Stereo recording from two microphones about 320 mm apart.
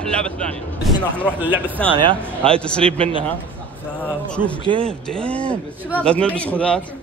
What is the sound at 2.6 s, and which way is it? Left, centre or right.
Speech, centre.